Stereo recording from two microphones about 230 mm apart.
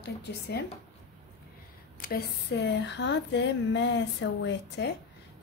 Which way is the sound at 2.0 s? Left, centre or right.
Left.